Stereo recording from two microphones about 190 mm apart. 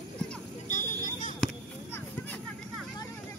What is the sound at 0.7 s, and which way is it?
Vehicle, 40° left (ahead or behind).